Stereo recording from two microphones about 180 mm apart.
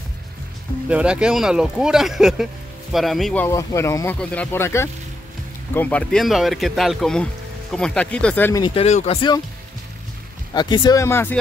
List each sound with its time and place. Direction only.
0.8 s speech: 5° right (ahead or behind)
3.4 s speech: 15° left (ahead or behind)
8.6 s speech: 35° left (ahead or behind)
10.5 s speech: 25° left (ahead or behind)